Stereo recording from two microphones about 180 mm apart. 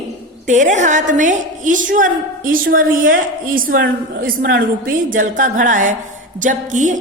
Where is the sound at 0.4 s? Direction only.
45° right (ahead or behind).